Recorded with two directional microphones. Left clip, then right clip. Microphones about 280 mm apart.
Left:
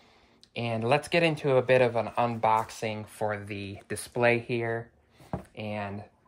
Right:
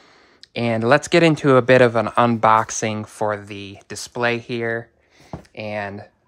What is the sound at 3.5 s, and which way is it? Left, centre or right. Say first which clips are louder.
Speech: right 3 dB; centre.